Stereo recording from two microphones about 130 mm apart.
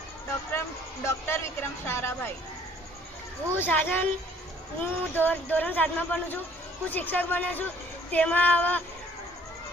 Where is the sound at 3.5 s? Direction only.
15° left (ahead or behind).